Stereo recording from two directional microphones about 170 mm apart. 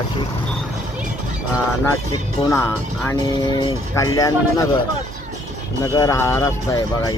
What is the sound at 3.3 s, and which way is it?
Speech, 25° left (ahead or behind).